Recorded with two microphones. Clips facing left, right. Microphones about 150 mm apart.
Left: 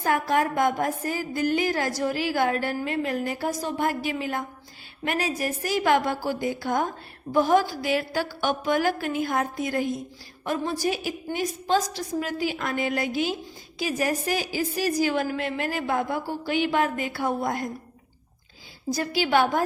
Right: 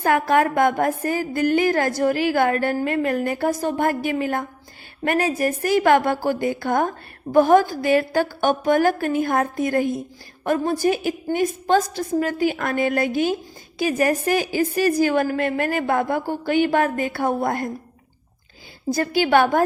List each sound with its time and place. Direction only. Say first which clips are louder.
0.0 s a woman's voice: right 5 dB; 65° right (ahead or behind)
18.9 s a woman's voice: right 5 dB; 55° right (ahead or behind)